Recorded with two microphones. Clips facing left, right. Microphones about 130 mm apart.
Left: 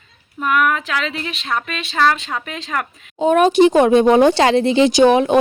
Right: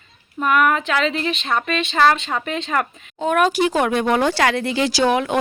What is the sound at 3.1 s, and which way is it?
Speech, 20° left (ahead or behind).